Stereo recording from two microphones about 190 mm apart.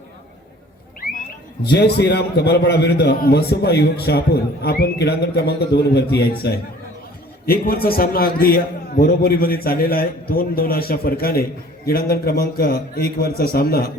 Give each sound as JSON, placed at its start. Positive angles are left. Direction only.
{"t": 1.6, "sound": "a man's voice", "side_deg": 60}